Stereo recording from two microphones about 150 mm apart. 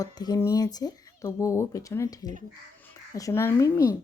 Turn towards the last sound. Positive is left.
turn(degrees=20)  # may be behind; listen again after turning